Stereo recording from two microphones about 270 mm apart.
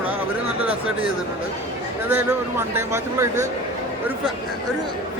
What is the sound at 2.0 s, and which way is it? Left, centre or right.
Speech, centre.